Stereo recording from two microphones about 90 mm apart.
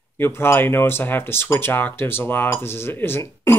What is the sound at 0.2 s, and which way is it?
Speech, 25° left (ahead or behind).